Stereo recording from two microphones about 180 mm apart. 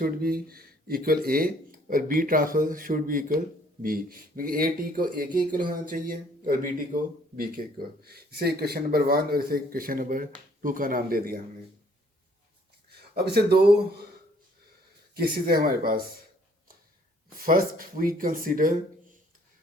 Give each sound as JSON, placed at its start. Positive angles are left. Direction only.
{"t": 0.0, "sound": "speech", "side_deg": -55}
{"t": 12.9, "sound": "speech", "side_deg": -60}
{"t": 15.4, "sound": "speech", "side_deg": -55}
{"t": 17.3, "sound": "speech", "side_deg": -50}